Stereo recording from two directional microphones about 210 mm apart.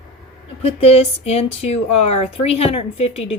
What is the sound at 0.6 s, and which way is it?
Speech, 30° left (ahead or behind).